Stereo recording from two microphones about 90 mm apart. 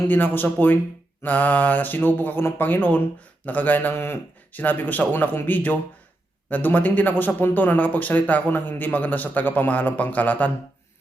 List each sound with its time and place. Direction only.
0.0 s speech: 20° left (ahead or behind)